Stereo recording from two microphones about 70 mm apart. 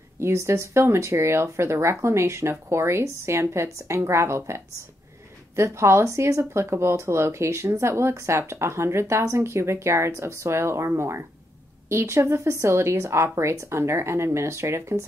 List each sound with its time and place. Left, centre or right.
0.2 s speech: right
5.6 s speech: right